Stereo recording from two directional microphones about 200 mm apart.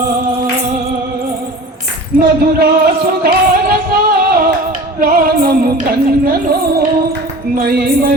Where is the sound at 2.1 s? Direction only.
50° right (ahead or behind).